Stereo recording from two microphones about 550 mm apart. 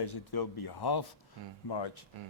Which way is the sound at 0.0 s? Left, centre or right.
Left.